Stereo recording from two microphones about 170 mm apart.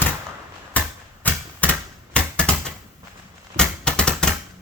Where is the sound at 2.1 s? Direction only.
5° left (ahead or behind).